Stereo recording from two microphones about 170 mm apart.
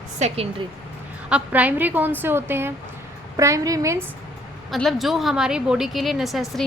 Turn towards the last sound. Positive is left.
turn(degrees=0)  # may be behind; listen again after turning